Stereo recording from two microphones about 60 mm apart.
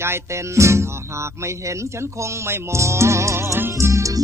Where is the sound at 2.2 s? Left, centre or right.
Right.